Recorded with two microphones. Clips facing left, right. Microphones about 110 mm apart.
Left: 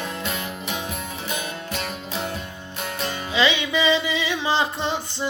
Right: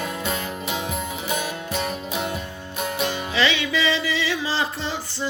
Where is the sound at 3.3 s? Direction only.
20° left (ahead or behind).